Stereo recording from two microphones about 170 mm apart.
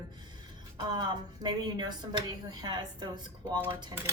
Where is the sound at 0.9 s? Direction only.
25° right (ahead or behind).